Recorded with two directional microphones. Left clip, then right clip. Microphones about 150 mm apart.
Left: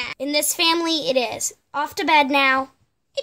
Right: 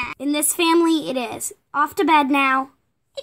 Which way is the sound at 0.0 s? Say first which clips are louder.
Left 1 dB; 5° left (ahead or behind).